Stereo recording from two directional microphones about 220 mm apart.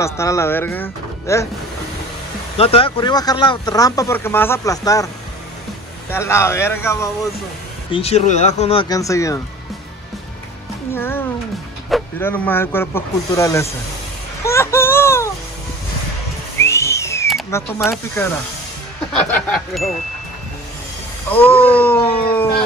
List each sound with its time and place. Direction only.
0.0 s speech: 15° left (ahead or behind)
2.5 s speech: 25° left (ahead or behind); by 7.1 s 10° left (ahead or behind)
7.9 s speech: 30° left (ahead or behind)
8.8 s speech: 15° left (ahead or behind)
11.0 s speech: 10° left (ahead or behind)
14.4 s music: 10° left (ahead or behind)
16.5 s whistle: 10° left (ahead or behind)
17.5 s speech: 10° left (ahead or behind)
21.3 s speech: 10° left (ahead or behind)